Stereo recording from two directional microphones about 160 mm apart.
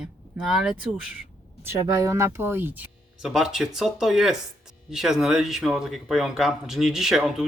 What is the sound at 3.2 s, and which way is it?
Speech, centre (ahead or behind).